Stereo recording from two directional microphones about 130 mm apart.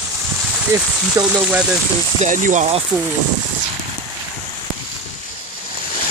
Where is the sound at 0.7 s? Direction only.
10° right (ahead or behind).